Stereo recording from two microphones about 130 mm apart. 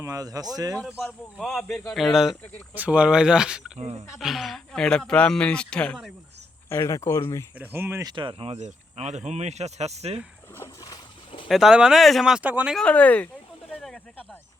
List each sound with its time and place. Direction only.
0.0 s speech: 25° right (ahead or behind)
0.8 s speech: centre (ahead or behind)
3.8 s speech: 55° right (ahead or behind)
4.2 s speech: centre (ahead or behind)
6.7 s speech: 20° left (ahead or behind)
7.5 s speech: 15° right (ahead or behind)
8.0 s speech: 40° right (ahead or behind)
8.5 s speech: 60° right (ahead or behind)
10.5 s speech: 20° left (ahead or behind)
11.4 s speech: centre (ahead or behind)
12.7 s speech: 10° left (ahead or behind)
13.8 s snake: centre (ahead or behind)